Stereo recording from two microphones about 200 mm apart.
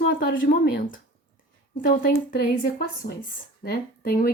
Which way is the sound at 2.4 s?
45° left (ahead or behind).